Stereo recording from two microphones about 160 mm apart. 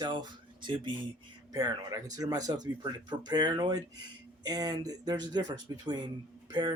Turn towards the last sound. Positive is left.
turn(degrees=-25)  # may be behind; listen again after turning